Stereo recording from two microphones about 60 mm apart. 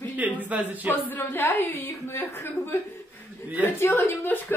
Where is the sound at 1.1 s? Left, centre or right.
Left.